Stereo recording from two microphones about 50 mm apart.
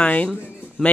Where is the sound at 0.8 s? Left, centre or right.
Centre.